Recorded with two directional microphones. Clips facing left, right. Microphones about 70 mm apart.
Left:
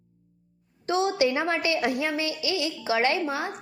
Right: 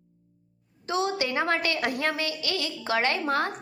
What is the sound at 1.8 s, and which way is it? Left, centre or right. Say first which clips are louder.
Speech: left 2 dB; right.